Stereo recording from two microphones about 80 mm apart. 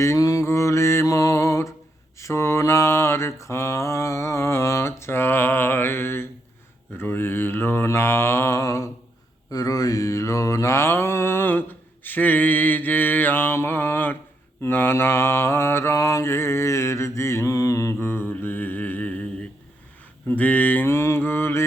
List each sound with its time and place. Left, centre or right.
0.0 s music: left
2.1 s mantra: left; by 19.5 s centre
20.2 s speech: centre
20.8 s mantra: left